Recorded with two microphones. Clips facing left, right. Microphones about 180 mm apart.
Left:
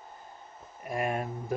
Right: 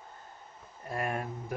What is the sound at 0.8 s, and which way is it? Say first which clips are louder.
Speech: left 3 dB; 20° left (ahead or behind).